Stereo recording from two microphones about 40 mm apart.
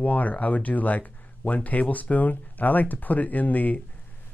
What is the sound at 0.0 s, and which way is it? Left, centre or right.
Speech, left.